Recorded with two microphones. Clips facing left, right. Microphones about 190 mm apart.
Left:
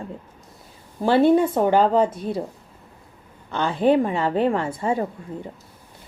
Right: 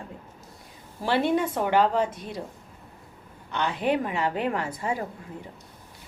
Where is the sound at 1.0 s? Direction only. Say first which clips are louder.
Left 8 dB; 30° left (ahead or behind).